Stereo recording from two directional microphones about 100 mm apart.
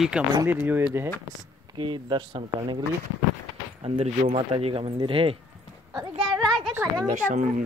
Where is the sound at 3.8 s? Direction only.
70° right (ahead or behind).